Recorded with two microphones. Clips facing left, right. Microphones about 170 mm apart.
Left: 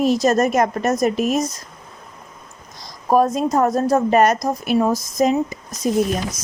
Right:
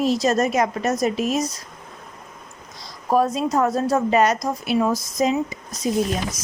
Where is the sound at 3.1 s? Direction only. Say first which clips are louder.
Left 3 dB; 45° left (ahead or behind).